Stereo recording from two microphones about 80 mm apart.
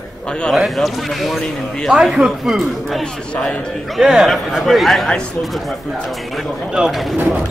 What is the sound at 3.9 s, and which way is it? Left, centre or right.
A man's voice, centre.